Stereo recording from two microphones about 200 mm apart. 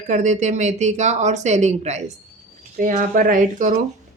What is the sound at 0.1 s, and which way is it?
Speech, 35° right (ahead or behind).